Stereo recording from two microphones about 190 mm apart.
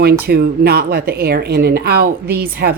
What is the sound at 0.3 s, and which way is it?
A woman's voice, 55° right (ahead or behind).